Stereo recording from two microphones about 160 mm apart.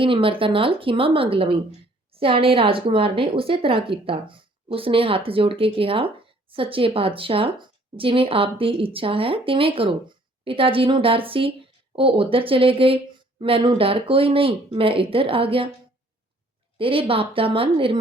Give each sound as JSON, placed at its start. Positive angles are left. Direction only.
{"t": 0.0, "sound": "a woman's voice", "side_deg": -35}
{"t": 16.7, "sound": "a woman's voice", "side_deg": -35}